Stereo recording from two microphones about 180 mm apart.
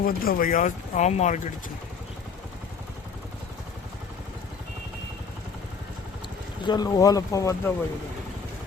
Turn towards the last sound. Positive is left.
turn(degrees=15)  # may be behind; listen again after turning